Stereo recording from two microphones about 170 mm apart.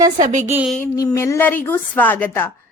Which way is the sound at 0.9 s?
15° left (ahead or behind).